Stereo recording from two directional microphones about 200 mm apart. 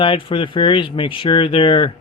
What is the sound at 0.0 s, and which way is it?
Speech, 25° left (ahead or behind).